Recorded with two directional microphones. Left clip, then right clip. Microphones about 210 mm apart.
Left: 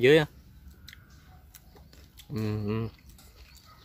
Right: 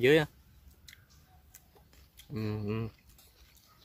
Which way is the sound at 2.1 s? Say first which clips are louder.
Left 4 dB; centre (ahead or behind).